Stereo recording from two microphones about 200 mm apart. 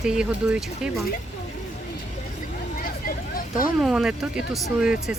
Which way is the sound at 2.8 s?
45° left (ahead or behind).